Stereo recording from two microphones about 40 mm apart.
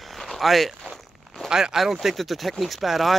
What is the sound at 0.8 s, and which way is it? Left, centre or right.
Walk, centre.